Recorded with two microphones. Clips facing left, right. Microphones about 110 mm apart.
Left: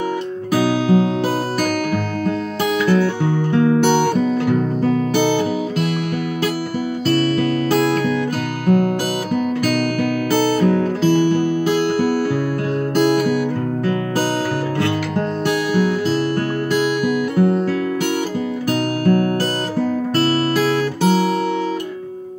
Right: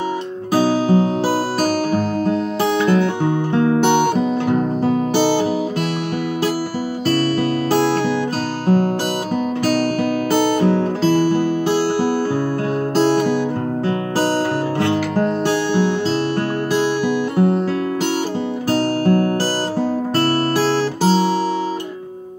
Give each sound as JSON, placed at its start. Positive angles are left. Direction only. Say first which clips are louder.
{"t": 0.6, "sound": "music", "louder": "right 1 dB", "side_deg": -35}
{"t": 2.2, "sound": "music", "louder": "right 2 dB", "side_deg": -30}
{"t": 7.1, "sound": "music", "louder": "even", "side_deg": -30}
{"t": 10.3, "sound": "music", "louder": "even", "side_deg": -25}
{"t": 14.8, "sound": "music", "louder": "right 2 dB", "side_deg": -30}
{"t": 18.7, "sound": "music", "louder": "right 1 dB", "side_deg": -35}
{"t": 20.5, "sound": "guitar", "louder": "even", "side_deg": -30}